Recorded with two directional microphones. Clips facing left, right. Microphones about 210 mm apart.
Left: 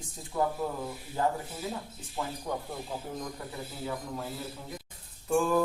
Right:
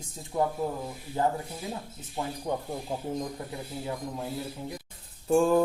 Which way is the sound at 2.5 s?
25° right (ahead or behind).